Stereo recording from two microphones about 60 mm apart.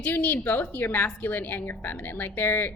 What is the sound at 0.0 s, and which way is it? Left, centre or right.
Speech, left.